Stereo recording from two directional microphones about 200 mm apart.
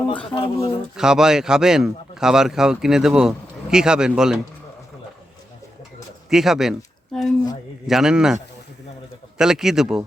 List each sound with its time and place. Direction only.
0.3 s speech: 30° left (ahead or behind)
0.9 s speech: 5° right (ahead or behind)
6.3 s speech: centre (ahead or behind)
9.4 s speech: centre (ahead or behind)